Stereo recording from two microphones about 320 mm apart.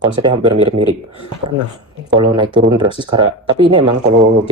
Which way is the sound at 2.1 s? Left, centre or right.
Centre.